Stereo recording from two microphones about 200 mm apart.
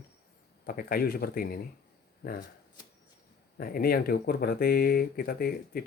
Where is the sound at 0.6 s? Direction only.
50° left (ahead or behind).